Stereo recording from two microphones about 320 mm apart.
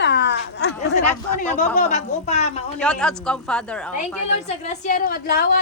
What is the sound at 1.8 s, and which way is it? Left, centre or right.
Speech, left.